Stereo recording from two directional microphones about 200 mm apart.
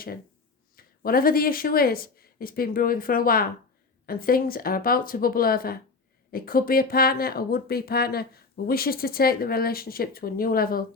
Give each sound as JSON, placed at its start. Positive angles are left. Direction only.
{"t": 0.8, "sound": "speech", "side_deg": 45}